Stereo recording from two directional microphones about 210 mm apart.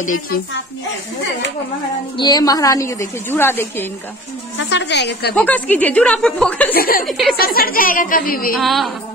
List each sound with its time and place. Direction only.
2.1 s a woman's voice: 20° left (ahead or behind)
4.6 s a woman's voice: 60° left (ahead or behind)
5.3 s a woman's voice: 5° left (ahead or behind)
6.7 s a woman's voice: 45° left (ahead or behind)
7.1 s music: centre (ahead or behind)
7.3 s a woman's voice: 45° left (ahead or behind)
8.5 s music: centre (ahead or behind)